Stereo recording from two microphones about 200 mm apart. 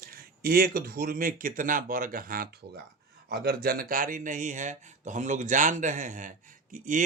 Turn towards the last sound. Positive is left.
turn(degrees=-40)  # may be behind; listen again after turning